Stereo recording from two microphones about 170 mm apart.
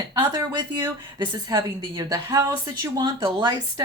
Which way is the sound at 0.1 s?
20° right (ahead or behind).